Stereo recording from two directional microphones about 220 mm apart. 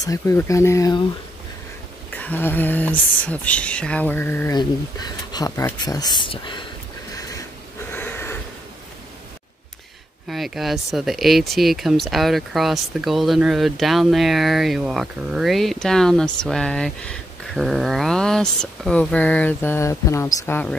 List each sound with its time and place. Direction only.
0.0 s speech: 15° left (ahead or behind)
2.0 s speech: 5° left (ahead or behind)
7.9 s a sound: 10° left (ahead or behind)
10.2 s speech: centre (ahead or behind)